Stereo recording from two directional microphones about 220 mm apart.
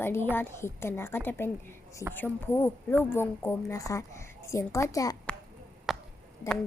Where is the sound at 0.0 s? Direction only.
10° left (ahead or behind).